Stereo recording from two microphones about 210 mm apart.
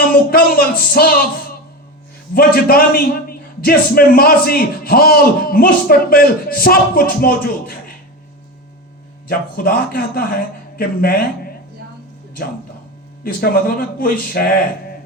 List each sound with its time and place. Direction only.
0.1 s a man's voice: 45° left (ahead or behind)
2.3 s a man's voice: 45° left (ahead or behind)
9.2 s a man's voice: 45° left (ahead or behind)
13.2 s a man's voice: 45° left (ahead or behind)